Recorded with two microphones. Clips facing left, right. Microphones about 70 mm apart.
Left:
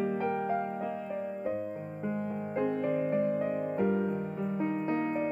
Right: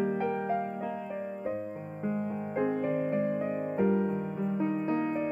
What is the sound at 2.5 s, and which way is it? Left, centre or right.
Music, right.